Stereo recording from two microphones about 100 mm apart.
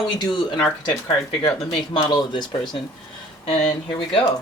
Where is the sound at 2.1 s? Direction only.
50° left (ahead or behind).